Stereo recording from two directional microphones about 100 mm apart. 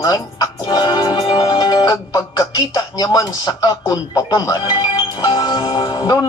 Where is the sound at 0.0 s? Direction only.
40° left (ahead or behind).